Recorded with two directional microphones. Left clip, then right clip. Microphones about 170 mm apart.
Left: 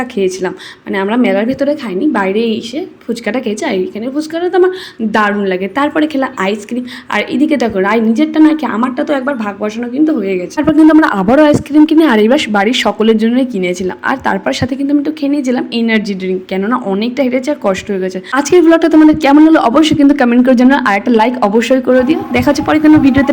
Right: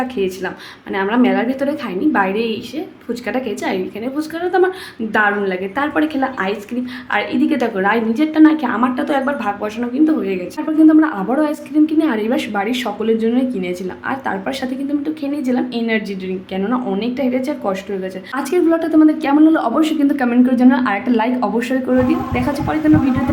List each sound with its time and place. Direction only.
0.2 s a woman's voice: 25° left (ahead or behind)
10.7 s a woman's voice: 50° left (ahead or behind)